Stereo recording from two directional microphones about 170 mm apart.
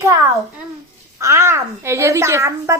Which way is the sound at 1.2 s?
15° right (ahead or behind).